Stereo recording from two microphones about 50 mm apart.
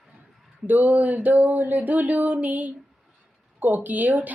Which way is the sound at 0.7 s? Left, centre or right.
Right.